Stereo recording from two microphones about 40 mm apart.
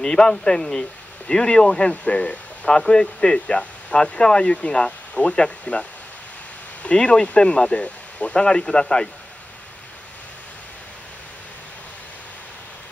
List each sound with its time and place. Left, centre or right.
0.0 s speech: left